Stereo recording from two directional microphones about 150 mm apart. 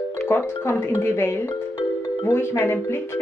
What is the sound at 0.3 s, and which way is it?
Speech, 15° left (ahead or behind).